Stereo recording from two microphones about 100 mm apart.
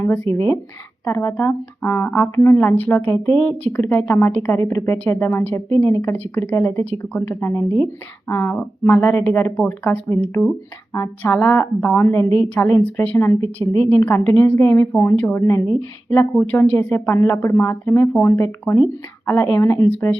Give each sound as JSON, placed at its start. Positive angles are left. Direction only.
{"t": 0.0, "sound": "a woman's voice", "side_deg": 25}